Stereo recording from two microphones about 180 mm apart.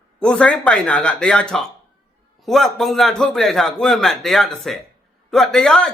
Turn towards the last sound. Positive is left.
turn(degrees=5)  # may be behind; listen again after turning